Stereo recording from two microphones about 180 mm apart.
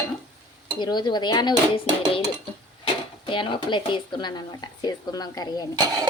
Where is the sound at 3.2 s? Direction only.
25° left (ahead or behind).